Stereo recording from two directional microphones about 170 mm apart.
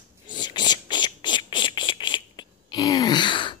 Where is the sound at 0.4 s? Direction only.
25° left (ahead or behind).